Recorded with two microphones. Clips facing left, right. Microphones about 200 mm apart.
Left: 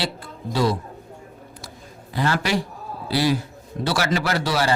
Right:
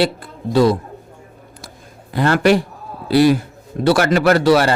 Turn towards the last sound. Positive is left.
turn(degrees=-60)  # may be behind; listen again after turning